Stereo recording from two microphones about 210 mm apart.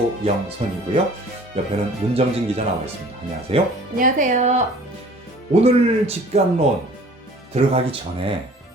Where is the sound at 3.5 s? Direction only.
25° right (ahead or behind).